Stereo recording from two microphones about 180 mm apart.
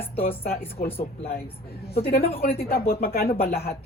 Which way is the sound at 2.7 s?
55° left (ahead or behind).